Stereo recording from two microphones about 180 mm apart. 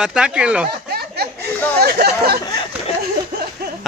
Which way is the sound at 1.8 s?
60° right (ahead or behind).